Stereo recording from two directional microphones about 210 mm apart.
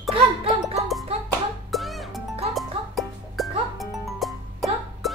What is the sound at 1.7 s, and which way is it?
Music, centre (ahead or behind).